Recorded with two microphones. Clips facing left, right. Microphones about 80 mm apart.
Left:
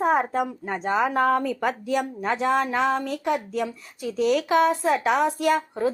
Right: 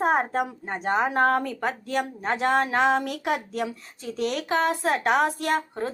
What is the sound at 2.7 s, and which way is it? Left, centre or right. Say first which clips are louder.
Speech: right 1 dB; right.